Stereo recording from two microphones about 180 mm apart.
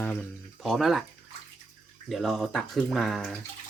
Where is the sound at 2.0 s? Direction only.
Centre (ahead or behind).